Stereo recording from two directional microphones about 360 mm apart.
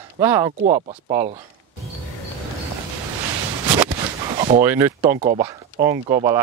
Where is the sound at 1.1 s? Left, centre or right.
Centre.